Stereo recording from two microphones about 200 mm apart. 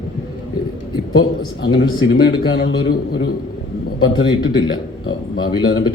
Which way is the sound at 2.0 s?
60° left (ahead or behind).